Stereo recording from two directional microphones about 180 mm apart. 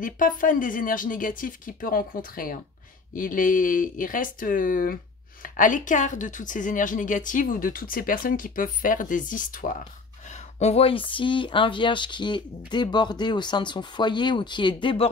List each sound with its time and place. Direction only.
0.0 s a woman's voice: 50° left (ahead or behind)
10.6 s speech: 35° left (ahead or behind)